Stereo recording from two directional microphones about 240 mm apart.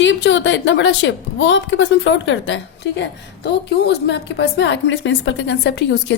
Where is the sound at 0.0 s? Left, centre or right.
Left.